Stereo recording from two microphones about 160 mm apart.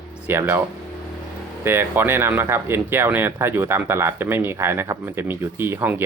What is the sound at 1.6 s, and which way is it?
Speech, 15° right (ahead or behind).